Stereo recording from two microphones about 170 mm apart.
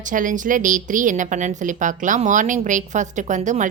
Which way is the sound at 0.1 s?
50° right (ahead or behind).